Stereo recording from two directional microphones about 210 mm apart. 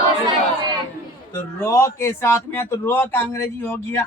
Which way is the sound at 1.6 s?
10° left (ahead or behind).